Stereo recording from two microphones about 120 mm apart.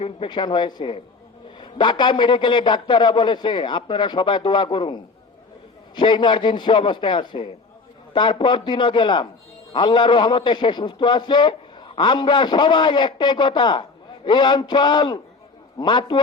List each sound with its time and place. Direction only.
0.0 s a man's voice: 45° left (ahead or behind)
6.0 s a man's voice: 40° left (ahead or behind)